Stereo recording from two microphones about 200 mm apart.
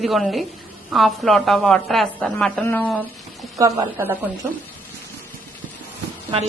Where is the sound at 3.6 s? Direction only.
15° right (ahead or behind).